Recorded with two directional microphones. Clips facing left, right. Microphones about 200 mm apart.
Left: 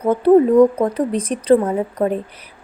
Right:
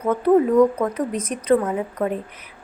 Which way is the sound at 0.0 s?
30° left (ahead or behind).